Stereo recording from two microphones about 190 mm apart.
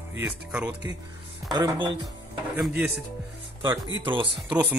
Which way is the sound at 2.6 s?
Centre (ahead or behind).